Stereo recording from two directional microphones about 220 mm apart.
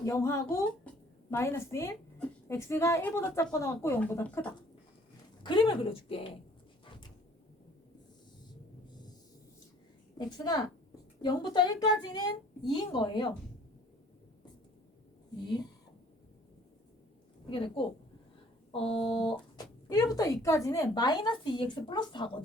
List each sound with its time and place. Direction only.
0.0 s a woman's voice: 15° left (ahead or behind)
5.4 s a woman's voice: 20° left (ahead or behind)
10.2 s a woman's voice: 20° left (ahead or behind)
17.5 s a woman's voice: 25° left (ahead or behind)